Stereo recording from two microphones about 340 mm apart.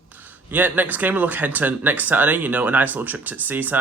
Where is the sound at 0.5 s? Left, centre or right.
Centre.